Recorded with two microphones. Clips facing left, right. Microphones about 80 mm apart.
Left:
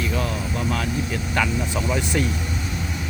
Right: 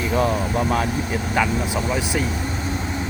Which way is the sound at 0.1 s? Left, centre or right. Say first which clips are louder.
Right 6 dB; right.